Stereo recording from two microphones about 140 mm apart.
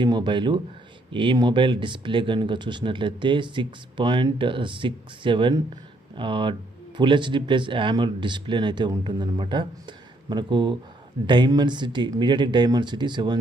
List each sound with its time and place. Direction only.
0.0 s speech: 35° right (ahead or behind)